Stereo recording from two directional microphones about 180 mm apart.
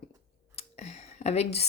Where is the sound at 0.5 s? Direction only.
35° left (ahead or behind).